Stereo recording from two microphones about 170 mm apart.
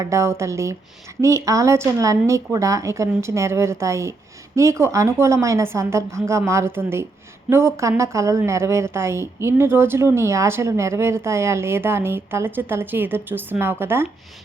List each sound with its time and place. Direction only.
0.0 s a woman's voice: 15° right (ahead or behind)